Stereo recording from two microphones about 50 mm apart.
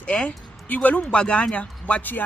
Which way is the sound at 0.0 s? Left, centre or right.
Left.